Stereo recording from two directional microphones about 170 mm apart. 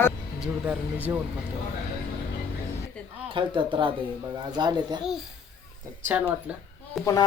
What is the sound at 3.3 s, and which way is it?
Speech, 30° right (ahead or behind).